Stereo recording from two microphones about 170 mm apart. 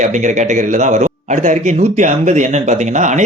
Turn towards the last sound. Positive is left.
turn(degrees=-45)  # may be behind; listen again after turning